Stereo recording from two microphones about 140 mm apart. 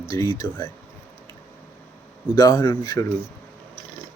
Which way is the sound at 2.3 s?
30° left (ahead or behind).